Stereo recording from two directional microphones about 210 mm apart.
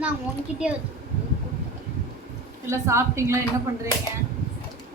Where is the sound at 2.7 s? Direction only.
15° right (ahead or behind).